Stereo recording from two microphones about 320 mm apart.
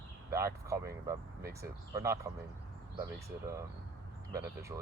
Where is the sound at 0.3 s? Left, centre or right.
Centre.